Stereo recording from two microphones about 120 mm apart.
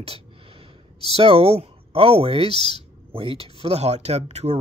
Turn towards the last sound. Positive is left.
turn(degrees=-65)  # may be behind; listen again after turning